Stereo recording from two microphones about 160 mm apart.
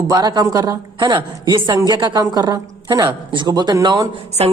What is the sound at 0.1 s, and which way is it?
A woman's voice, 25° right (ahead or behind).